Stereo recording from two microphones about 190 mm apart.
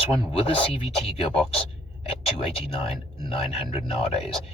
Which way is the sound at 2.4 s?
30° left (ahead or behind).